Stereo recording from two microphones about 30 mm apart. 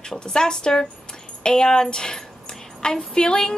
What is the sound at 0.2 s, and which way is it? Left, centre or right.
A woman's voice, left.